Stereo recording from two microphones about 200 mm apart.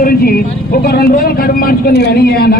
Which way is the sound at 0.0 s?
50° left (ahead or behind).